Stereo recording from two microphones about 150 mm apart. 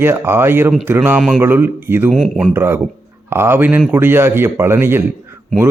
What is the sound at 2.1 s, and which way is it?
Mantra, 5° right (ahead or behind).